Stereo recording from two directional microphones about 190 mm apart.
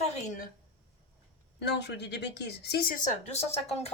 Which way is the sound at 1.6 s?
65° left (ahead or behind).